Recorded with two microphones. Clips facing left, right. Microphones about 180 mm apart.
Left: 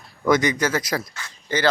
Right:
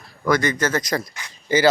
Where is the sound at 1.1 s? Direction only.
15° right (ahead or behind).